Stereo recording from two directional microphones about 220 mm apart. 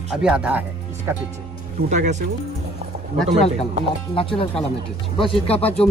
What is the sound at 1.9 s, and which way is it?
Speech, 30° right (ahead or behind).